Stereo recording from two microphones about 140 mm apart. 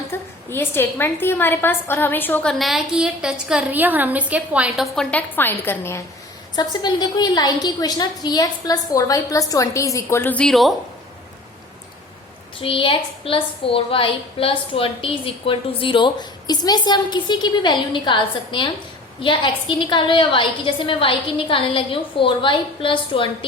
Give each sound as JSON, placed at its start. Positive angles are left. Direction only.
{"t": 0.1, "sound": "a woman's voice", "side_deg": 15}
{"t": 4.9, "sound": "a woman's voice", "side_deg": 10}
{"t": 6.6, "sound": "a woman's voice", "side_deg": 30}
{"t": 12.5, "sound": "a woman's voice", "side_deg": 40}